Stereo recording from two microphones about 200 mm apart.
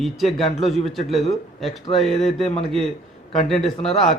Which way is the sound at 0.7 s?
Centre (ahead or behind).